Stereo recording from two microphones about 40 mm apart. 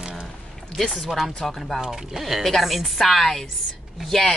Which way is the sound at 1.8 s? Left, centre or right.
Centre.